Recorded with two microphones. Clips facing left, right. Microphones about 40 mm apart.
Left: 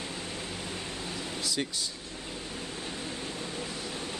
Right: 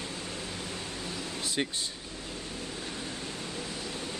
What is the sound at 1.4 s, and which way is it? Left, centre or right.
Speech, right.